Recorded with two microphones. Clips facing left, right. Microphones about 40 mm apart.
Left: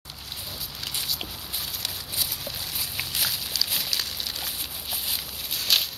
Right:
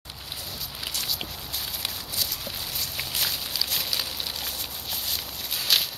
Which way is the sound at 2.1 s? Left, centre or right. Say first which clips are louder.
Left 1 dB; centre.